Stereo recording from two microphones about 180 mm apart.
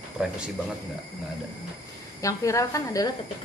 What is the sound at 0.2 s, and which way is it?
Speech, 5° right (ahead or behind).